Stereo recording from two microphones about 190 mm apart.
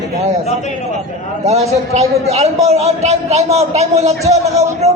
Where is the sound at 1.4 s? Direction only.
35° right (ahead or behind).